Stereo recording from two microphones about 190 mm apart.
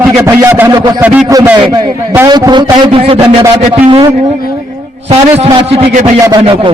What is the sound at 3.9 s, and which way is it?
Music, 30° right (ahead or behind).